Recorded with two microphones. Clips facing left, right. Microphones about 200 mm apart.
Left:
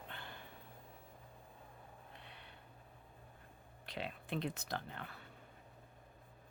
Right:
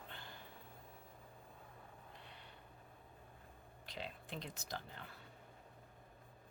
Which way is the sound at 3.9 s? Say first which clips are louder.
Left 6 dB; 60° left (ahead or behind).